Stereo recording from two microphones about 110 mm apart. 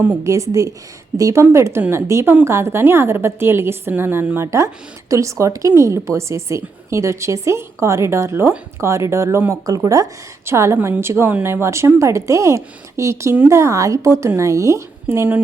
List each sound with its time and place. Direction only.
0.3 s a woman's voice: 30° right (ahead or behind)